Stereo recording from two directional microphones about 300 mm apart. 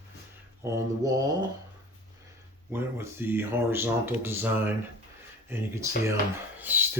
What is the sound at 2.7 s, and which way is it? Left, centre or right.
Speech, centre.